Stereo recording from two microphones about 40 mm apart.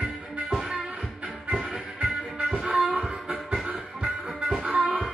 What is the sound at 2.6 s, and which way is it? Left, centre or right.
Music, right.